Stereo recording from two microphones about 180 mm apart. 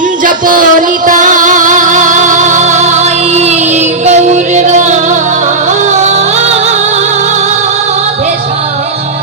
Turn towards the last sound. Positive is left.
turn(degrees=-40)  # may be behind; listen again after turning